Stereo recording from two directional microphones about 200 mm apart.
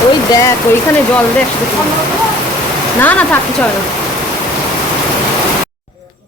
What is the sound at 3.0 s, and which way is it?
Speech, 10° left (ahead or behind).